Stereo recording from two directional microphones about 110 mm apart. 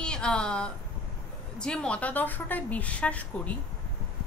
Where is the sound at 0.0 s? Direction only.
10° left (ahead or behind).